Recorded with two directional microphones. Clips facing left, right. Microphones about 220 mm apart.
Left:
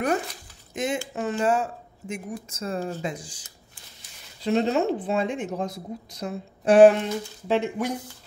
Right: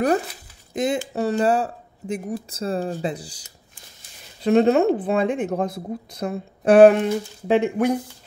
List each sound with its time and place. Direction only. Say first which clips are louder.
0.7 s speech: right 5 dB; 35° right (ahead or behind)
4.4 s speech: right 6 dB; 55° right (ahead or behind)